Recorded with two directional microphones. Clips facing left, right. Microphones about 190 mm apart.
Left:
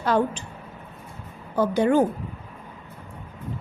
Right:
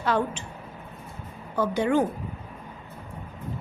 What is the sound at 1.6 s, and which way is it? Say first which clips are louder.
Speech: left 3 dB; 40° left (ahead or behind).